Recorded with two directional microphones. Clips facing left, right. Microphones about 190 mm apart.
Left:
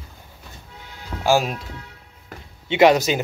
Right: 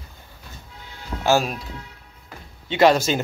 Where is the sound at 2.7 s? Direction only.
20° left (ahead or behind).